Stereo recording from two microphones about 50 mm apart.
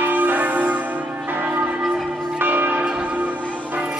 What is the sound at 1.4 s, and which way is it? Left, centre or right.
Church bell, right.